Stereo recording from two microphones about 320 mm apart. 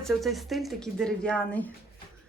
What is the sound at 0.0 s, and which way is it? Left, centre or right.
Speech, centre.